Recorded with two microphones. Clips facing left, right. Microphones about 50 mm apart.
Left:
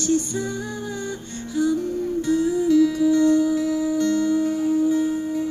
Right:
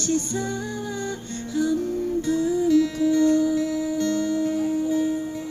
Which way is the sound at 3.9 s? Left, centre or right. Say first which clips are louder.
Left 4 dB; right.